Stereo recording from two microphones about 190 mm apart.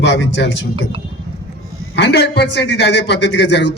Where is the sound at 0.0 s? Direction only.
65° left (ahead or behind).